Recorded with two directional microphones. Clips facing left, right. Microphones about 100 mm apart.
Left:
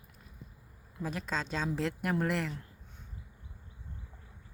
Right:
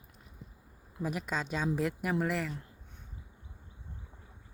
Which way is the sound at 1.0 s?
15° right (ahead or behind).